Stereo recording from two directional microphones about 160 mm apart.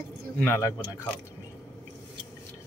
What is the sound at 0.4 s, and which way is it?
Speech, 15° left (ahead or behind).